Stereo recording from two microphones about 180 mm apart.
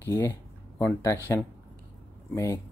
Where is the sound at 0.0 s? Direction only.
15° left (ahead or behind).